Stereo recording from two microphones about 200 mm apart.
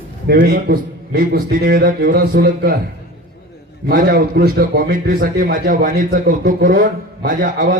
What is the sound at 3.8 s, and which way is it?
A man's voice, 45° right (ahead or behind).